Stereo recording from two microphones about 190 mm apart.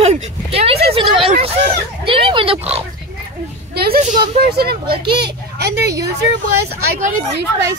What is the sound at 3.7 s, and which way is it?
A woman's voice, 50° right (ahead or behind).